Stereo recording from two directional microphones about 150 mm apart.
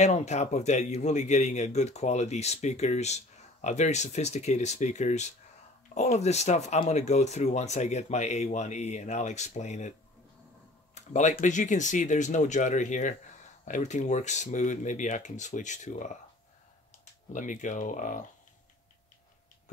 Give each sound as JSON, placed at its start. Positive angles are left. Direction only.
{"t": 0.0, "sound": "a man's voice", "side_deg": 50}
{"t": 11.0, "sound": "a man's voice", "side_deg": 55}
{"t": 17.3, "sound": "speech", "side_deg": 60}